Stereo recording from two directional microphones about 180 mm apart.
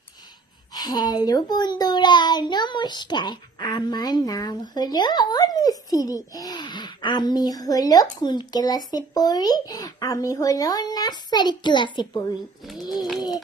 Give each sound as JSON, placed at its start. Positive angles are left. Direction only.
{"t": 0.7, "sound": "a child's voice", "side_deg": 25}
{"t": 12.6, "sound": "speech", "side_deg": 0}
{"t": 13.1, "sound": "a child's voice", "side_deg": 20}